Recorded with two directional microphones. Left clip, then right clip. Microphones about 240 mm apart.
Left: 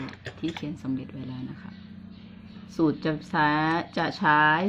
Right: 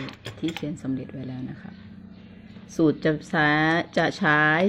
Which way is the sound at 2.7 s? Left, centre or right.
Centre.